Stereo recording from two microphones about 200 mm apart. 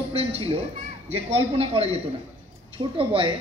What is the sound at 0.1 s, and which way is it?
Music, 30° right (ahead or behind).